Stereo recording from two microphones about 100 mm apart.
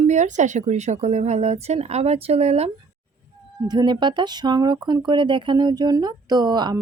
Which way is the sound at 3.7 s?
50° right (ahead or behind).